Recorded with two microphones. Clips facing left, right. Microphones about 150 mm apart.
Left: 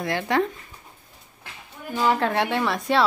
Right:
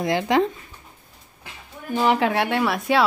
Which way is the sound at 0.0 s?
20° right (ahead or behind).